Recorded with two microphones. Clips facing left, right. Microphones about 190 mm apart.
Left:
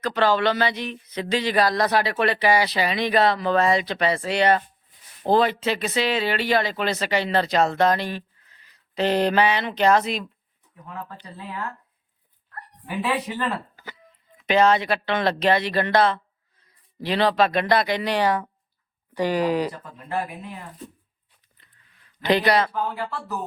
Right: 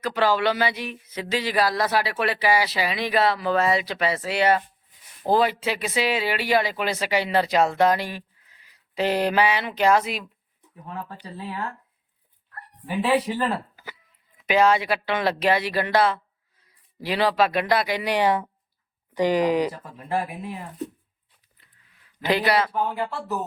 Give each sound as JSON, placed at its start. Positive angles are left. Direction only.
{"t": 0.0, "sound": "speech", "side_deg": -10}
{"t": 13.3, "sound": "speech", "side_deg": -25}
{"t": 14.4, "sound": "speech", "side_deg": -10}
{"t": 20.0, "sound": "speech", "side_deg": -30}
{"t": 21.6, "sound": "a sound", "side_deg": -5}
{"t": 22.7, "sound": "speech", "side_deg": -25}